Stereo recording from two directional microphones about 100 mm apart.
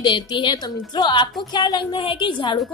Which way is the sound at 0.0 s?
50° left (ahead or behind).